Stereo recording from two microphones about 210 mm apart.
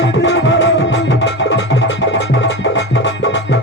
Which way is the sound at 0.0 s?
60° left (ahead or behind).